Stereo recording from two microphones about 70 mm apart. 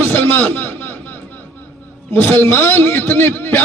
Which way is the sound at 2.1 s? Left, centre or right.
Left.